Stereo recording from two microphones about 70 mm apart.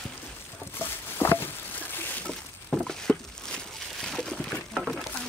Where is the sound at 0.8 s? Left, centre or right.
Left.